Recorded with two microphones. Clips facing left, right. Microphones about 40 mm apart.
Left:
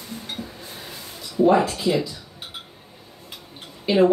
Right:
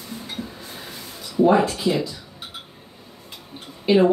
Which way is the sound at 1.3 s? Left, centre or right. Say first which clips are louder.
Right 1 dB; centre.